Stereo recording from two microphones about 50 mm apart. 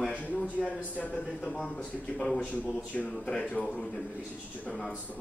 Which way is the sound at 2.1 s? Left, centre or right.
Centre.